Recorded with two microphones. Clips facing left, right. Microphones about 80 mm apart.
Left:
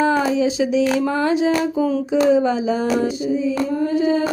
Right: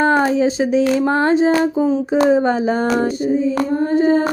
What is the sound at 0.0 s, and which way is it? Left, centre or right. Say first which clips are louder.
Speech: right 3 dB; right.